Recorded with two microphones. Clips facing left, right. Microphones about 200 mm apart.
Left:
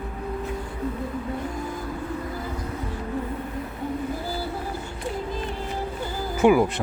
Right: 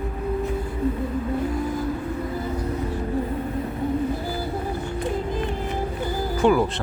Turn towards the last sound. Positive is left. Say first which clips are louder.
# left 1 dB
turn(degrees=10)  # may be behind; listen again after turning